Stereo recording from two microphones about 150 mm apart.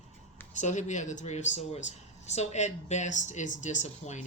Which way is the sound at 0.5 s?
55° left (ahead or behind).